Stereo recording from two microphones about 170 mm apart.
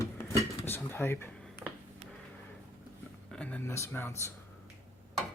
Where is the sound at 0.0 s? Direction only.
15° left (ahead or behind).